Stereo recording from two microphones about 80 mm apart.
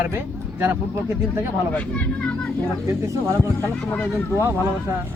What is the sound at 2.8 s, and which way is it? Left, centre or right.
Speech, right.